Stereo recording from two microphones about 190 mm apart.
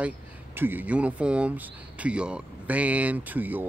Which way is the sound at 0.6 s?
10° right (ahead or behind).